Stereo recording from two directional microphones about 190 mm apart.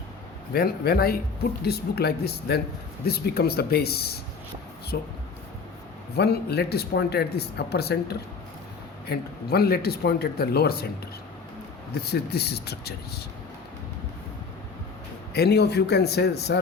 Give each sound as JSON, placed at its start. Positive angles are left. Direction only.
{"t": 0.5, "sound": "a man's voice", "side_deg": 55}
{"t": 6.1, "sound": "speech", "side_deg": 60}
{"t": 12.3, "sound": "speech", "side_deg": 60}
{"t": 15.3, "sound": "speech", "side_deg": 60}